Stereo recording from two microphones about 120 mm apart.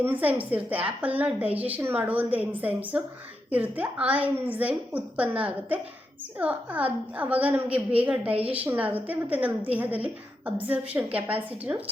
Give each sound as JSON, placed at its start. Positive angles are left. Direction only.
{"t": 0.0, "sound": "a woman's voice", "side_deg": -15}
{"t": 8.3, "sound": "a woman's voice", "side_deg": -55}
{"t": 8.5, "sound": "a woman's voice", "side_deg": -15}